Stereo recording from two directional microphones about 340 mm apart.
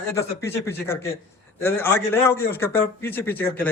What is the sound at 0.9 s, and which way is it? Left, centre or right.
A man's voice, centre.